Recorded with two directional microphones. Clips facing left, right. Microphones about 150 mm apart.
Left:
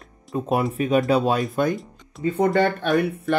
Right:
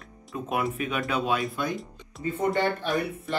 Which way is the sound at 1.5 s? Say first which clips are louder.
Left 8 dB; 50° left (ahead or behind).